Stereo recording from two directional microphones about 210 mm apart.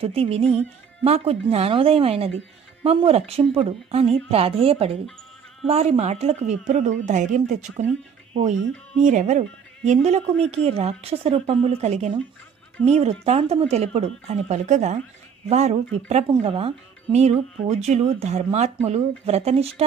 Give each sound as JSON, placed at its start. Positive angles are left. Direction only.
{"t": 0.0, "sound": "speech", "side_deg": -30}